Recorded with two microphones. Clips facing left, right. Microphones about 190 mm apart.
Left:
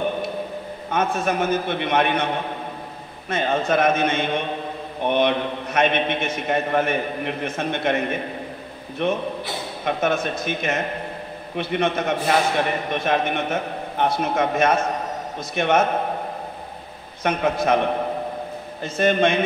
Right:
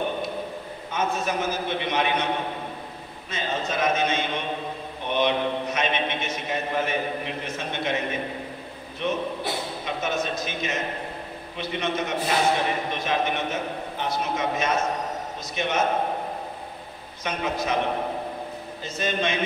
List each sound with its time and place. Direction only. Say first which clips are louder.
0.9 s a man's voice: left 4 dB; 55° left (ahead or behind)
3.3 s a man's voice: left 8 dB; 55° left (ahead or behind)
17.2 s a man's voice: left 6 dB; 55° left (ahead or behind)
18.8 s a man's voice: left 9 dB; 55° left (ahead or behind)